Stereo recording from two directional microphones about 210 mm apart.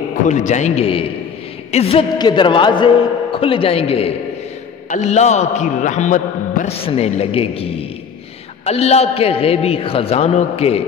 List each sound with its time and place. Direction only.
0.3 s a man's voice: 35° left (ahead or behind)